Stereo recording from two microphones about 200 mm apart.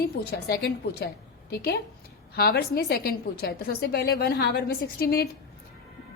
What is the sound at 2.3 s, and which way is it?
A woman's voice, 50° left (ahead or behind).